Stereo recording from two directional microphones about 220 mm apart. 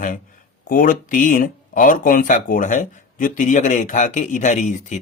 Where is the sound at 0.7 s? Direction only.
40° left (ahead or behind).